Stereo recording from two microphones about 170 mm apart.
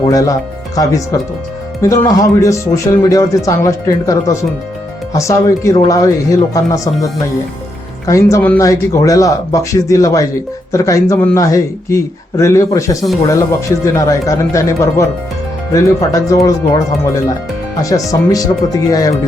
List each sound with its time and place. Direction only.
0.0 s speech: 20° left (ahead or behind)
8.0 s speech: 20° left (ahead or behind)
18.1 s speech: 20° left (ahead or behind)